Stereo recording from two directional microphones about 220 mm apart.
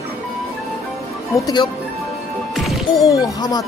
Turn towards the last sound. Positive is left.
turn(degrees=15)  # may be behind; listen again after turning